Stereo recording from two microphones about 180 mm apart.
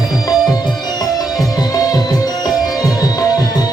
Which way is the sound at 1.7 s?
20° left (ahead or behind).